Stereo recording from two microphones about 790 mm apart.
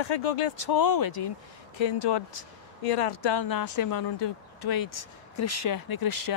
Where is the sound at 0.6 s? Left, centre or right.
Left.